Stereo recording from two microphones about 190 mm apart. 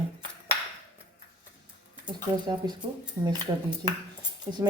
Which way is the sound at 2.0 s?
20° right (ahead or behind).